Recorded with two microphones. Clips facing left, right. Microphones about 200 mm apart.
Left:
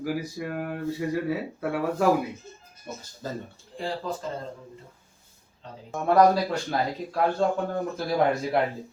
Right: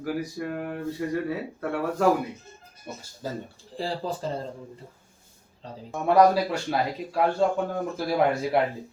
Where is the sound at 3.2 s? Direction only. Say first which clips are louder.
Right 1 dB; 10° right (ahead or behind).